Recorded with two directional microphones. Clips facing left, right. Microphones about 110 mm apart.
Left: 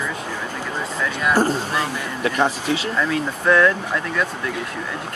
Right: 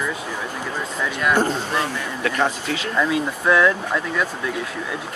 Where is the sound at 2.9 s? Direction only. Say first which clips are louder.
Right 1 dB; 10° right (ahead or behind).